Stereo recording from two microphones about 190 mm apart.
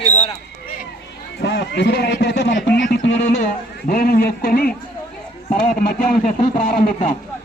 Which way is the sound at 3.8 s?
50° left (ahead or behind).